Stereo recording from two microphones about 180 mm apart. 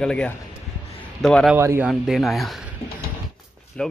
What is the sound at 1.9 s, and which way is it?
Speech, centre (ahead or behind).